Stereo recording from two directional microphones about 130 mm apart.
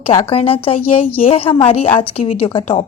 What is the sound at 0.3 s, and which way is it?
Speech, 45° left (ahead or behind).